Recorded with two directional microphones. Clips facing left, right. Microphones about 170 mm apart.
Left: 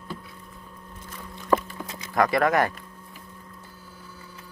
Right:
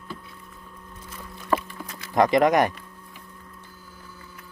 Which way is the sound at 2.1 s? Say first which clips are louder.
Right 3 dB; 20° right (ahead or behind).